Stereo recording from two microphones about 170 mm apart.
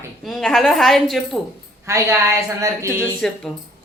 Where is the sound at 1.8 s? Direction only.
15° right (ahead or behind).